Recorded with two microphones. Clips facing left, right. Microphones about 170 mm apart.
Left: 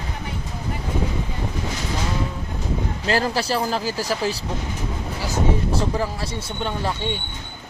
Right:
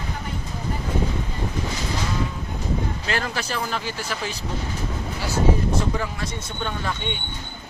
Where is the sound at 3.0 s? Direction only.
35° left (ahead or behind).